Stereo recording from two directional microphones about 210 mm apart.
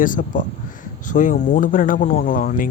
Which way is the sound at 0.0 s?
40° left (ahead or behind).